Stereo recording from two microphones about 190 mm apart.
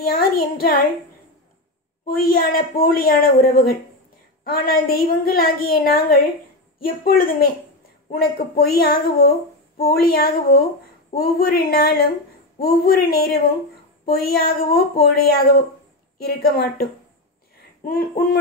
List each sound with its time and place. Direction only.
0.0 s a woman's voice: 55° left (ahead or behind)
2.0 s speech: 50° left (ahead or behind)